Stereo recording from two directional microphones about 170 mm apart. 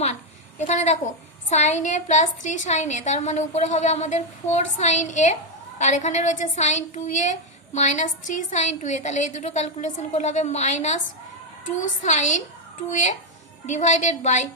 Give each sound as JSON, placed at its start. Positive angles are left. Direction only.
{"t": 0.7, "sound": "a woman's voice", "side_deg": 45}